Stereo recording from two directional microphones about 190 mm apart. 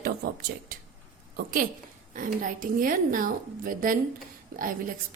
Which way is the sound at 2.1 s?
45° right (ahead or behind).